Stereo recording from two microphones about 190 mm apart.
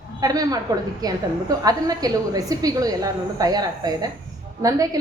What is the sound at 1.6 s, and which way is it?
A woman's voice, 20° right (ahead or behind).